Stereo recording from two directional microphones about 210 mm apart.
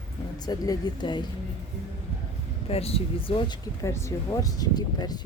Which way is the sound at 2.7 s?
30° left (ahead or behind).